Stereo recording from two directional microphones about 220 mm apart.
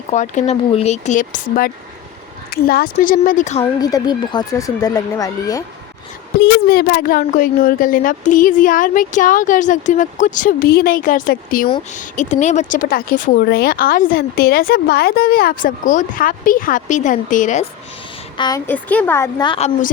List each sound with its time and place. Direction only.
0.1 s speech: 30° left (ahead or behind)
3.6 s speech: 15° left (ahead or behind)
6.3 s speech: 50° left (ahead or behind)
18.3 s speech: 15° left (ahead or behind)